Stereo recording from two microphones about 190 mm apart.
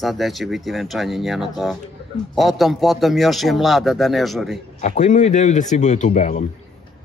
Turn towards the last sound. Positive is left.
turn(degrees=40)  # may be behind; listen again after turning